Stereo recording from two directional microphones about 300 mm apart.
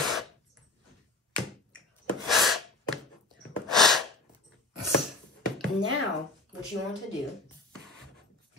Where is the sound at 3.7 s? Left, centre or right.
Centre.